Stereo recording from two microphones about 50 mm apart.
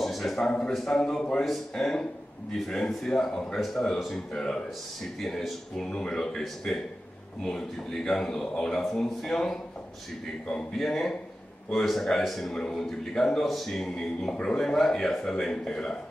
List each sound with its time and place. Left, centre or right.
0.0 s a sound: centre
0.5 s a man's voice: centre
1.4 s a man's voice: centre
3.1 s a man's voice: centre